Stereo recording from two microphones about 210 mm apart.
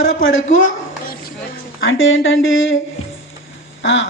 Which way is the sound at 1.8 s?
65° left (ahead or behind).